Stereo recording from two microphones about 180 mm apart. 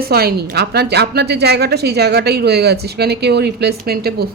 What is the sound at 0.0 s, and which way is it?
A woman's voice, 55° right (ahead or behind).